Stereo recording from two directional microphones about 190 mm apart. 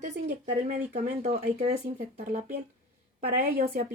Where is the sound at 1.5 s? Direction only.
45° right (ahead or behind).